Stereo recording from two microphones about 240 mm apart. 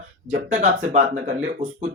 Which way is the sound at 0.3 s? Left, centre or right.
Right.